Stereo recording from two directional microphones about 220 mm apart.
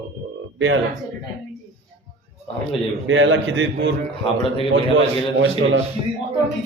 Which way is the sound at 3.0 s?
60° right (ahead or behind).